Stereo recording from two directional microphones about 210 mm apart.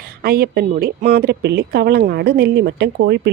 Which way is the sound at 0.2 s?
45° right (ahead or behind).